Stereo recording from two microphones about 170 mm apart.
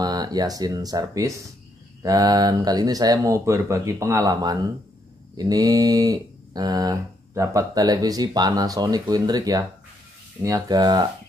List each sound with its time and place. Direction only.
0.0 s speech: 25° right (ahead or behind)